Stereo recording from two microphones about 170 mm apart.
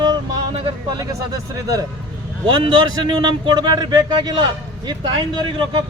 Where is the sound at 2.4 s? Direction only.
25° right (ahead or behind).